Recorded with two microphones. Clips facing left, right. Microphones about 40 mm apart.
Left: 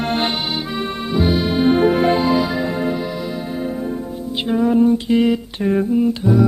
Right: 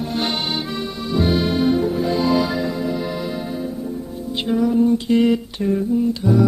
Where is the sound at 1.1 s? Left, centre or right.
Centre.